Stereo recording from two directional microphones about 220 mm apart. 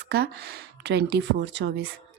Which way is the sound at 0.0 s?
45° right (ahead or behind).